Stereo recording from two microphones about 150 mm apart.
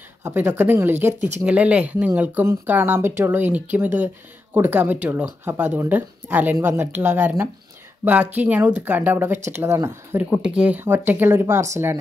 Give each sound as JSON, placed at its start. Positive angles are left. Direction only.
{"t": 0.2, "sound": "speech", "side_deg": -15}
{"t": 10.3, "sound": "speech", "side_deg": -5}